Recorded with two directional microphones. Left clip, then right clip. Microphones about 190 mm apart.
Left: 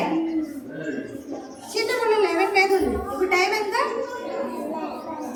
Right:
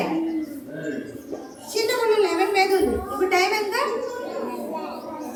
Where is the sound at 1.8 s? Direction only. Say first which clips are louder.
Right 1 dB; centre (ahead or behind).